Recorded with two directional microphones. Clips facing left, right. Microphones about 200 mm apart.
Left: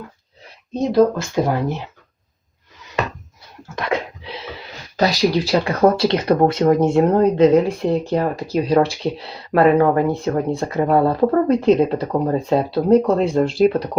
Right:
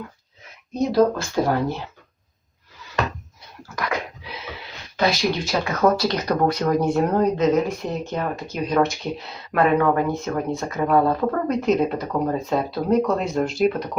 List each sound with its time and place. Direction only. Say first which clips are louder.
0.4 s speech: left 2 dB; 25° left (ahead or behind)
3.8 s a sound: left 4 dB; 25° left (ahead or behind)
4.9 s speech: left 4 dB; 35° left (ahead or behind)